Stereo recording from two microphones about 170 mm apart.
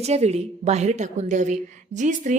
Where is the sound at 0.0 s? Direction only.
40° right (ahead or behind).